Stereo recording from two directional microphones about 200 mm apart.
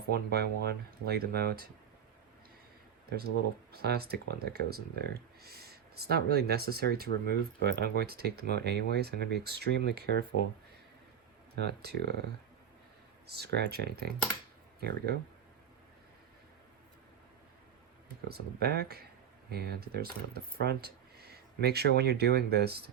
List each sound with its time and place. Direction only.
0.1 s speech: 50° right (ahead or behind)
3.1 s speech: 50° right (ahead or behind)
11.5 s speech: 55° right (ahead or behind)
13.2 s speech: 55° right (ahead or behind)
18.3 s speech: 50° right (ahead or behind)